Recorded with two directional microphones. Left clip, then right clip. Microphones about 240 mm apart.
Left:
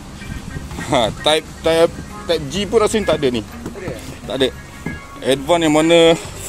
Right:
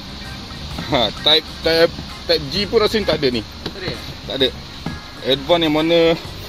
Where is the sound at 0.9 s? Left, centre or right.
Left.